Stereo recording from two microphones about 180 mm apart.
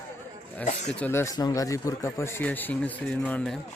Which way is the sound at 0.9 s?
10° left (ahead or behind).